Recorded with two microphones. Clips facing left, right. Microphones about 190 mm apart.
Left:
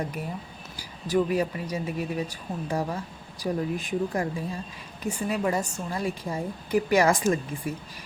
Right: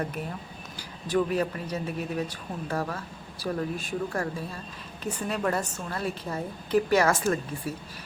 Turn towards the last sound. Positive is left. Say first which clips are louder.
# left 2 dB
turn(degrees=15)  # may be behind; listen again after turning